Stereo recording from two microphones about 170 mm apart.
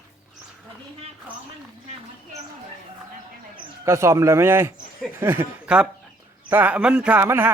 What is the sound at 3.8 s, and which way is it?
A man's voice, 15° right (ahead or behind).